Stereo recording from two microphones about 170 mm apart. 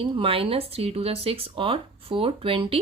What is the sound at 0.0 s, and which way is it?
A woman's voice, 30° right (ahead or behind).